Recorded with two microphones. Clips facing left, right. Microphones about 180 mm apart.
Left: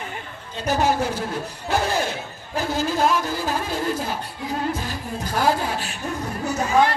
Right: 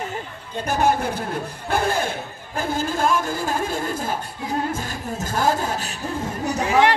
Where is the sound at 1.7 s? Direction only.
50° right (ahead or behind).